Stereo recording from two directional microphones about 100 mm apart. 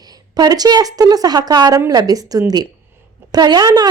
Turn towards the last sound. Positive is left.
turn(degrees=-40)  # may be behind; listen again after turning